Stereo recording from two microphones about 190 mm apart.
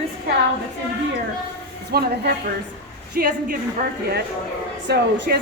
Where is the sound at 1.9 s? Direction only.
55° right (ahead or behind).